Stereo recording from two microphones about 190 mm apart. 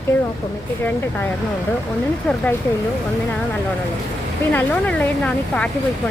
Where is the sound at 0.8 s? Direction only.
10° left (ahead or behind).